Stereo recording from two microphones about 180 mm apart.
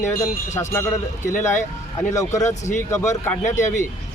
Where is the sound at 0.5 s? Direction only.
15° left (ahead or behind).